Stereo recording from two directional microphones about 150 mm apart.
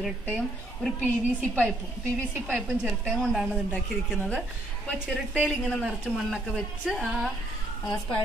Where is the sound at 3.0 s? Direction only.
Centre (ahead or behind).